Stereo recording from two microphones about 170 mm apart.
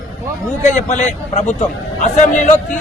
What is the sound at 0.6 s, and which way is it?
A man's voice, 45° left (ahead or behind).